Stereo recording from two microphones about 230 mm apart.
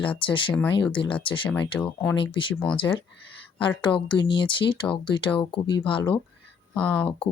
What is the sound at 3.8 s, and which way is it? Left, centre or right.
Speech, centre.